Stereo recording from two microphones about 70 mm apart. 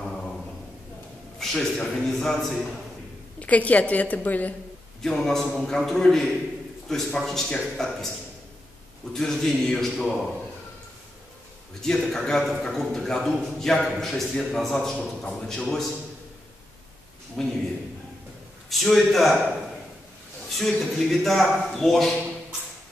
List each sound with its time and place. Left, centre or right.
0.0 s a sound: centre
1.4 s a man's voice: centre
3.3 s a woman's voice: left
5.0 s a man's voice: centre
9.1 s a man's voice: centre
11.8 s a man's voice: centre
17.4 s a man's voice: centre
18.7 s a man's voice: centre
20.5 s a man's voice: centre